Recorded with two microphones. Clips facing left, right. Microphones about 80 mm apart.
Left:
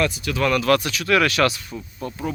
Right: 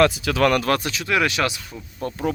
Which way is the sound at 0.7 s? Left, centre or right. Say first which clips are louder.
Left 3 dB; right.